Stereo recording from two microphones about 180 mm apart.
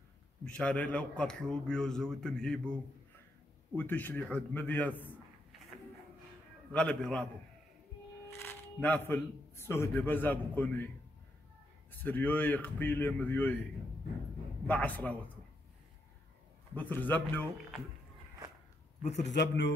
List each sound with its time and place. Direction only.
0.5 s a man's voice: 5° left (ahead or behind)
6.7 s a man's voice: 5° left (ahead or behind)
8.3 s a man's voice: 10° left (ahead or behind)
11.9 s speech: 10° left (ahead or behind)
14.7 s speech: 10° left (ahead or behind)
16.7 s speech: 10° left (ahead or behind)
19.3 s speech: 75° left (ahead or behind)